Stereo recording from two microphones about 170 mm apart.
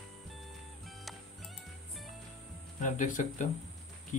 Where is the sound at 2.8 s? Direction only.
45° left (ahead or behind).